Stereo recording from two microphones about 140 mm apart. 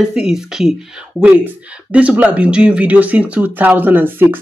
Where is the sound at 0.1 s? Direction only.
5° right (ahead or behind).